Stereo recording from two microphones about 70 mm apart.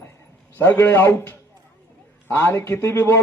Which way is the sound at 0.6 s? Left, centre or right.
Left.